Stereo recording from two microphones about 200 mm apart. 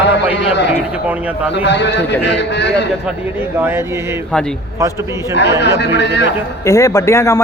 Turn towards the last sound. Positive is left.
turn(degrees=15)  # may be behind; listen again after turning